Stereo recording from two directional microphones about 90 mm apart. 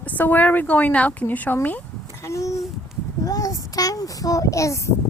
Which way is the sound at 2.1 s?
35° left (ahead or behind).